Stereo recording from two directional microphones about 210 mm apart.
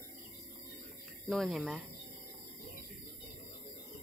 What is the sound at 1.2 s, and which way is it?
Speech, centre (ahead or behind).